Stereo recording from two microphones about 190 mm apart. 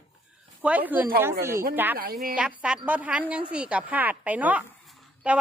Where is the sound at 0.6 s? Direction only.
10° right (ahead or behind).